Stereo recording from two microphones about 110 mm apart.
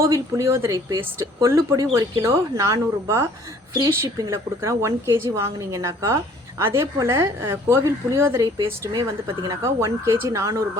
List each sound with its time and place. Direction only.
0.0 s speech: 25° right (ahead or behind)